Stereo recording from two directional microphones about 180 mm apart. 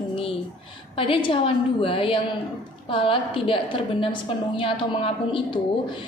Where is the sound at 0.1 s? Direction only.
30° left (ahead or behind).